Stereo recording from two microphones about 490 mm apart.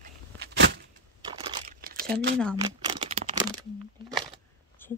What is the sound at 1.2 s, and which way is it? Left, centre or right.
Crumpling, centre.